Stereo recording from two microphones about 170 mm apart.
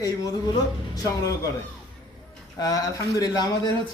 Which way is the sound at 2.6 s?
20° left (ahead or behind).